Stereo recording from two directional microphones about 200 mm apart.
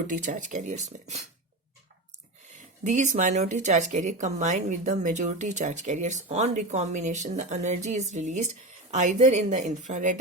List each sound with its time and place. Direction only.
0.1 s speech: 40° right (ahead or behind)
2.5 s speech: 35° right (ahead or behind)